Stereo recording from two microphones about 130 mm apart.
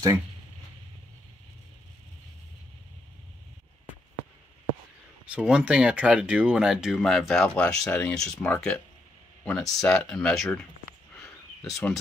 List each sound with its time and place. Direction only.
5.2 s speech: 10° right (ahead or behind)